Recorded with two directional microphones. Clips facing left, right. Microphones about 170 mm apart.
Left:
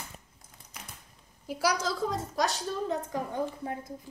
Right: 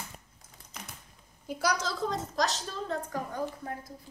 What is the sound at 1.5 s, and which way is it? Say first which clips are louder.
A woman's voice: left 2 dB; 5° left (ahead or behind).